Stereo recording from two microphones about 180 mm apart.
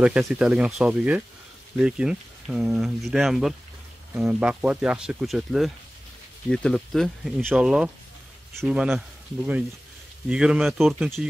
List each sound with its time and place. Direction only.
0.0 s speech: 5° right (ahead or behind)
10.2 s speech: 5° right (ahead or behind)